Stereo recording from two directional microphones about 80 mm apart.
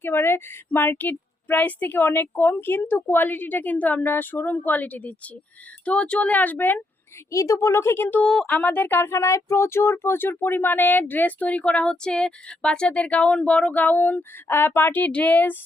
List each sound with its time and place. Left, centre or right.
0.0 s speech: left
7.3 s speech: left
8.3 s speech: centre
8.5 s speech: left